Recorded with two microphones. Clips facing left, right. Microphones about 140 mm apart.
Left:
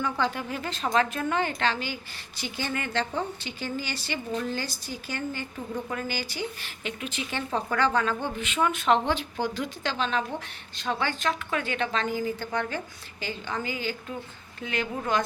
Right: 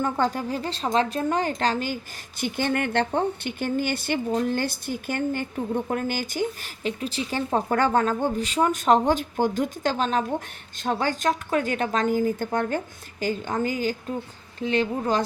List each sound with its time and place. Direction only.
0.0 s a woman's voice: 45° right (ahead or behind)
2.4 s a woman's voice: 55° right (ahead or behind)
14.6 s a woman's voice: 30° right (ahead or behind)